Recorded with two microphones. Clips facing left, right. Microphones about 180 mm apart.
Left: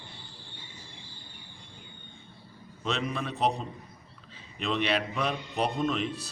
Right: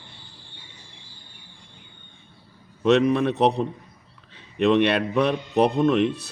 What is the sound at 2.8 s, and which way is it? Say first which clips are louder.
A man's voice: right 14 dB; 65° right (ahead or behind).